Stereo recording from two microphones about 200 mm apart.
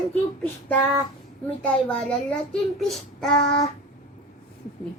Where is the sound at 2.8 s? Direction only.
Centre (ahead or behind).